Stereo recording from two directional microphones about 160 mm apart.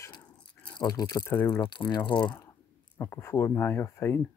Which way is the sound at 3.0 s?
15° left (ahead or behind).